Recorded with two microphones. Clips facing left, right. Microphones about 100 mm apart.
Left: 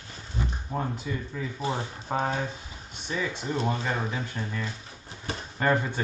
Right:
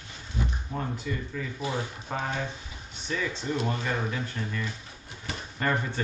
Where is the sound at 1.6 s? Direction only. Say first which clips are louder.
Left 1 dB; 30° left (ahead or behind).